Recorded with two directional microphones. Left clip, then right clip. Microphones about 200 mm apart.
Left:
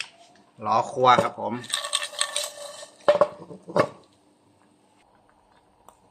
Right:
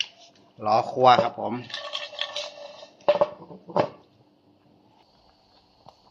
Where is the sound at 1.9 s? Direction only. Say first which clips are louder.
Left 2 dB; 40° left (ahead or behind).